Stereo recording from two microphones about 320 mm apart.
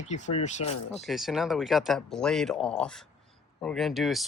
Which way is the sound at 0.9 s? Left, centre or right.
Centre.